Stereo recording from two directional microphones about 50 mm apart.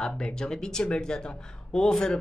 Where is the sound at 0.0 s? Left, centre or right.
Centre.